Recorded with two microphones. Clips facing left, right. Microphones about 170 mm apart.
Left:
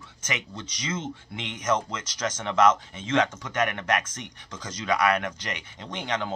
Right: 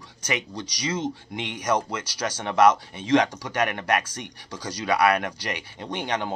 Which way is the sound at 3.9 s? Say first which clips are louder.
Right 3 dB; 35° right (ahead or behind).